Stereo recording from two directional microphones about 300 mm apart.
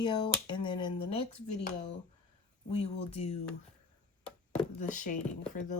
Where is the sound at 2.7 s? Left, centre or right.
Centre.